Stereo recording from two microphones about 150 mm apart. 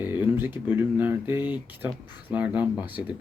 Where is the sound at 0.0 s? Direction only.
10° right (ahead or behind).